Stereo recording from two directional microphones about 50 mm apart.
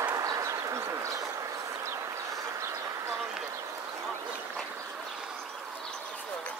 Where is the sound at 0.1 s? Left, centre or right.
Right.